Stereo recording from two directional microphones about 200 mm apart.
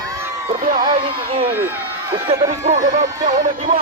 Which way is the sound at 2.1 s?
30° right (ahead or behind).